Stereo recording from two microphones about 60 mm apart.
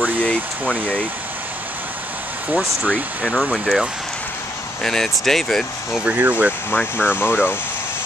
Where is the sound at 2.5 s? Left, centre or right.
Right.